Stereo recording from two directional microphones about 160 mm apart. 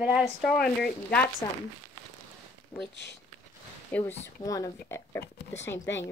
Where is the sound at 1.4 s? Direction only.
15° left (ahead or behind).